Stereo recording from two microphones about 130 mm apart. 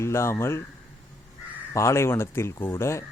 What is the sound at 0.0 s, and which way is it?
Speech, 20° left (ahead or behind).